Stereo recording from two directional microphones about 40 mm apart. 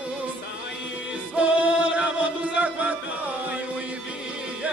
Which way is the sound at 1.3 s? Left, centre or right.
Right.